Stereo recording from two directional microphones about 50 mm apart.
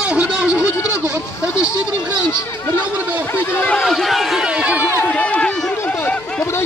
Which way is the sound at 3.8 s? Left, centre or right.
Centre.